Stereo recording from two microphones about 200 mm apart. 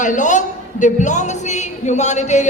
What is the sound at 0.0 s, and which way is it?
A man's voice, 40° left (ahead or behind).